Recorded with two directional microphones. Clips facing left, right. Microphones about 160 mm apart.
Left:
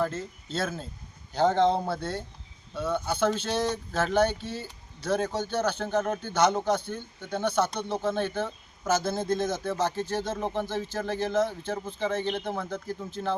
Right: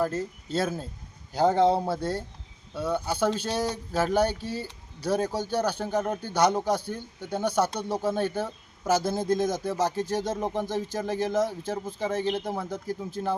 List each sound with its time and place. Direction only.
0.0 s speech: 15° right (ahead or behind)
4.4 s speech: 35° right (ahead or behind)
5.0 s speech: 10° right (ahead or behind)